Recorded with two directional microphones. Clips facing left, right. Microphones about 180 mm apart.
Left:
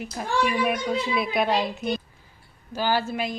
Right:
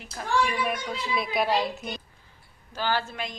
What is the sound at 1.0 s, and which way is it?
Speech, centre (ahead or behind).